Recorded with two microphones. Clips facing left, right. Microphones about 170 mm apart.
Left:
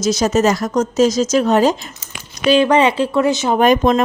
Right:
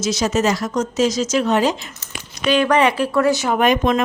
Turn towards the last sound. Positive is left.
turn(degrees=40)  # may be behind; listen again after turning